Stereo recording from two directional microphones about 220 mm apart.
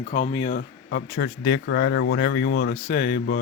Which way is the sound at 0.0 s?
30° left (ahead or behind).